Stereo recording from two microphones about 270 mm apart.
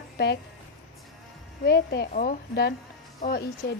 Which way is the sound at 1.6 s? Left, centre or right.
Left.